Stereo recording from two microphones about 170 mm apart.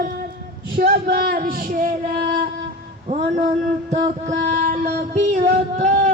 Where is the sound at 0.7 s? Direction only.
60° right (ahead or behind).